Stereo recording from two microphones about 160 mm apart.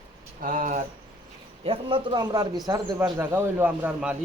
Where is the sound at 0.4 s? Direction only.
55° right (ahead or behind).